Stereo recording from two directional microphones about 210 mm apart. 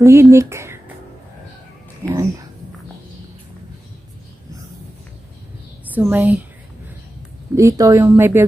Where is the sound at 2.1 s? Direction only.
15° right (ahead or behind).